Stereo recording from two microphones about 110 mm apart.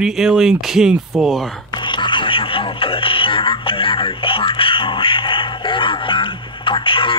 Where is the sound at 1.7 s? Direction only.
45° left (ahead or behind).